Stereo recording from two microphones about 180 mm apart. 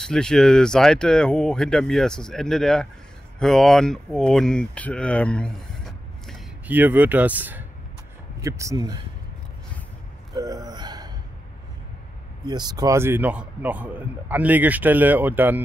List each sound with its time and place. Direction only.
0.0 s speech: 5° left (ahead or behind)
6.7 s a man's voice: 10° right (ahead or behind)
10.3 s gasp: 20° right (ahead or behind)
12.4 s a man's voice: 25° right (ahead or behind)